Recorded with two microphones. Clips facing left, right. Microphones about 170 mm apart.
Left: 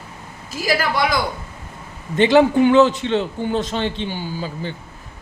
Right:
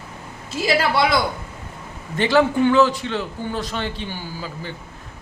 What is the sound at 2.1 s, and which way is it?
A man's voice, 20° left (ahead or behind).